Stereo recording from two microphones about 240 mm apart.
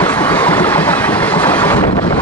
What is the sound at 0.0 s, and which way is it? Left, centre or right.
Vehicle, centre.